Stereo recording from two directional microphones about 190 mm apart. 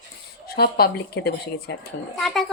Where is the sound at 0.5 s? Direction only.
55° left (ahead or behind).